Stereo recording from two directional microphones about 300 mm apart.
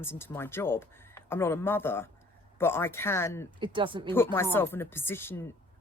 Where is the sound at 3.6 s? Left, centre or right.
Centre.